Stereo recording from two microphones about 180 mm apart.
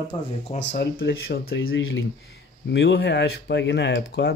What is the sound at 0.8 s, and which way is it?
Speech, 60° left (ahead or behind).